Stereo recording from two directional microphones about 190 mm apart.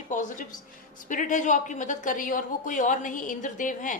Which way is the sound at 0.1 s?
45° left (ahead or behind).